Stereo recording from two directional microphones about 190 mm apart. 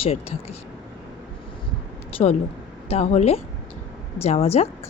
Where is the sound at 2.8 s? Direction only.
30° left (ahead or behind).